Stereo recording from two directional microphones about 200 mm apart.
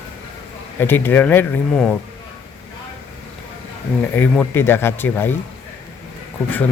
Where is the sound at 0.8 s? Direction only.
10° left (ahead or behind).